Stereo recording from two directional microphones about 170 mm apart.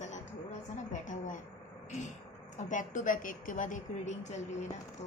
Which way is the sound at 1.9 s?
45° left (ahead or behind).